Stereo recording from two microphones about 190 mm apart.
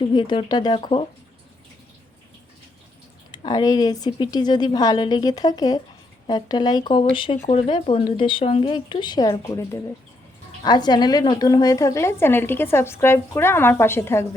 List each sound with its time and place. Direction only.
0.1 s a woman's voice: 25° left (ahead or behind)
3.3 s a woman's voice: 20° left (ahead or behind)